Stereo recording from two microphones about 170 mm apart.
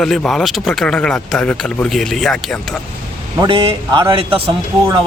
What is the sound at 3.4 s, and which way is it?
A man's voice, 30° right (ahead or behind).